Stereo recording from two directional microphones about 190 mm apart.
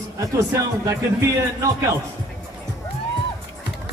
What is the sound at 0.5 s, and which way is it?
Speech, 15° right (ahead or behind).